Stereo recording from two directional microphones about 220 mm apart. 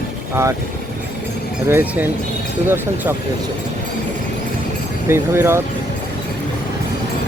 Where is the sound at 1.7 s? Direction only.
10° right (ahead or behind).